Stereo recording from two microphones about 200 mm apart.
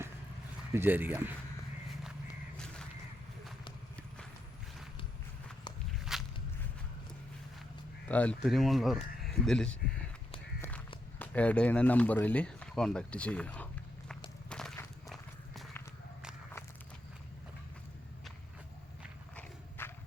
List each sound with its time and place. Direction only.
0.7 s speech: 10° right (ahead or behind)
6.1 s walk: centre (ahead or behind)
8.0 s speech: 5° left (ahead or behind)
11.2 s speech: 5° left (ahead or behind)
14.5 s walk: 5° left (ahead or behind)
19.4 s horse: 10° left (ahead or behind)